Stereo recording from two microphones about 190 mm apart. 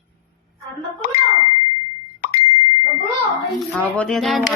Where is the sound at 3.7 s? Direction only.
5° left (ahead or behind).